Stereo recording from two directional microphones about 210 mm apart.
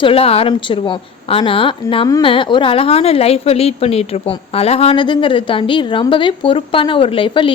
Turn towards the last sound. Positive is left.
turn(degrees=25)  # may be behind; listen again after turning